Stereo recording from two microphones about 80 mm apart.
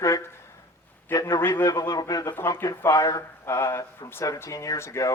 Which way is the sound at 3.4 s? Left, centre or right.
Left.